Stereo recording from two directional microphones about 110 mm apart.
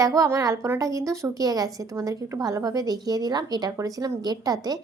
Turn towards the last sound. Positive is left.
turn(degrees=-35)  # may be behind; listen again after turning